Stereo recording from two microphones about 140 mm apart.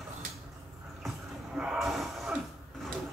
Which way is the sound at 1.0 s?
5° right (ahead or behind).